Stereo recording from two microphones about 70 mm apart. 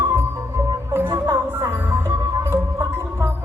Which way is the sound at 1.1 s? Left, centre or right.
Right.